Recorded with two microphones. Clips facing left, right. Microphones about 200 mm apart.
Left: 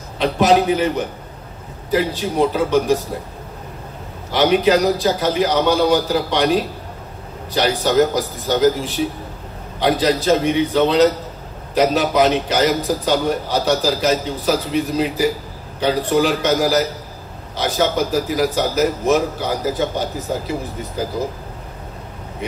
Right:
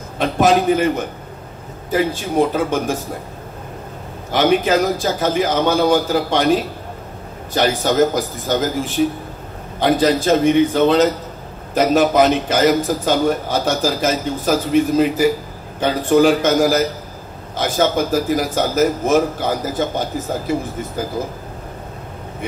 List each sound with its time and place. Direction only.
0.2 s a man's voice: 50° right (ahead or behind)
4.3 s a man's voice: 50° right (ahead or behind)
7.5 s a man's voice: 45° right (ahead or behind)